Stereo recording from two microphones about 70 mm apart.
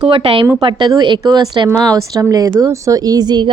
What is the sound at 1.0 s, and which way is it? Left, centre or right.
Speech, right.